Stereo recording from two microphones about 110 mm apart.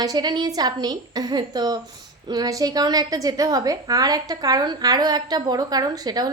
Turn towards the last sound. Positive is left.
turn(degrees=-35)  # may be behind; listen again after turning